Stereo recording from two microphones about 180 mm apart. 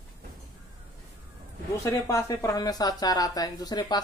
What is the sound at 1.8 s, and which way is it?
Speech, 15° left (ahead or behind).